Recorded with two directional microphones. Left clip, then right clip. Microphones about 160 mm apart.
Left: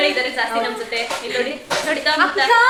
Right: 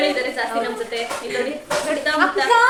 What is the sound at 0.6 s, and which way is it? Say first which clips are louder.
A woman's voice: left 2 dB; 15° right (ahead or behind).